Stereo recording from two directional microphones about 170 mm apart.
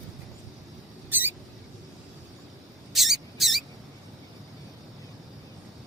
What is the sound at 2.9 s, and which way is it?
Mouse, centre (ahead or behind).